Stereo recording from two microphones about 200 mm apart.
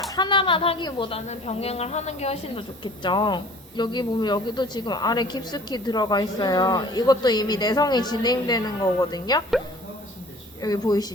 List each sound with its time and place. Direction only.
0.2 s a woman's voice: 25° left (ahead or behind)
10.6 s a woman's voice: 20° left (ahead or behind)